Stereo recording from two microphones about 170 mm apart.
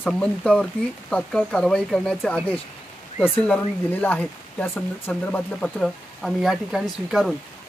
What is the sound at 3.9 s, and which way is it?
Speech, 10° left (ahead or behind).